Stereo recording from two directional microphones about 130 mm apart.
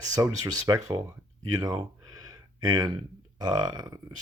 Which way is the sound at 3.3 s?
35° right (ahead or behind).